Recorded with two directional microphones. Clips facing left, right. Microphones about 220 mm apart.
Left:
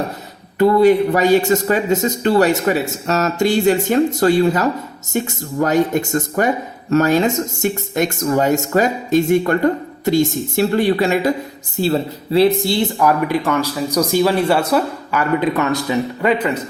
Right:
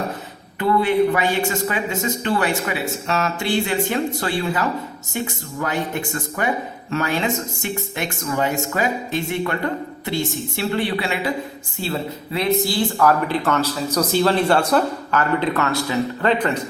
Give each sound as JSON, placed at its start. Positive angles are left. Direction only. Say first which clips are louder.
{"t": 0.6, "sound": "speech", "louder": "left 6 dB", "side_deg": 40}